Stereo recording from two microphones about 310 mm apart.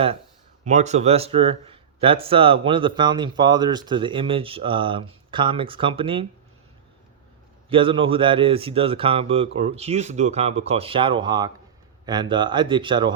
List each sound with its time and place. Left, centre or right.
0.6 s speech: right
7.7 s speech: centre